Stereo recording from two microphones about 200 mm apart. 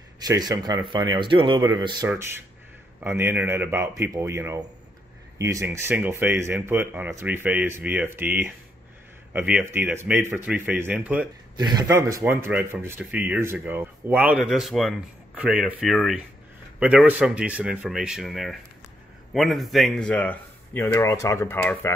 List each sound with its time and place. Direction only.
0.3 s speech: 20° right (ahead or behind)
11.5 s speech: 20° right (ahead or behind); by 21.9 s 10° left (ahead or behind)